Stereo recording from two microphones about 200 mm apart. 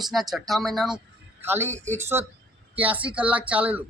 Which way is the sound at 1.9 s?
10° right (ahead or behind).